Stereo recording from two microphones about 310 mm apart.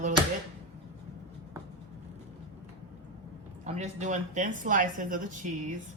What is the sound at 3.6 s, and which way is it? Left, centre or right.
A woman's voice, right.